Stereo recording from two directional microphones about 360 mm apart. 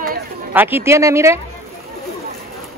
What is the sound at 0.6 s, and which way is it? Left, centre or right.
Speech, centre.